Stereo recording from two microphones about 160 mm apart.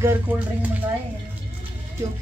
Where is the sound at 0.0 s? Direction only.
15° right (ahead or behind).